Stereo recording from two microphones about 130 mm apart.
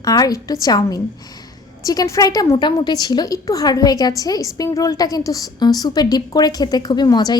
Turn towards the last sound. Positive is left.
turn(degrees=30)  # may be behind; listen again after turning